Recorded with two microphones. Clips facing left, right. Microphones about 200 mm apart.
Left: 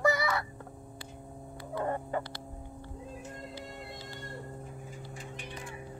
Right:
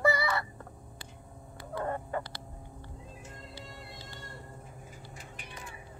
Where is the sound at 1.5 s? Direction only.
20° left (ahead or behind).